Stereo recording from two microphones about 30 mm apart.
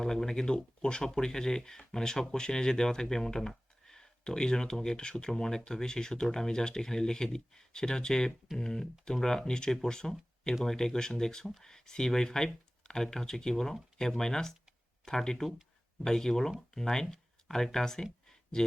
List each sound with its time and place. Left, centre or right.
0.0 s speech: centre
0.4 s speech: left
3.8 s a sound: centre
4.2 s speech: left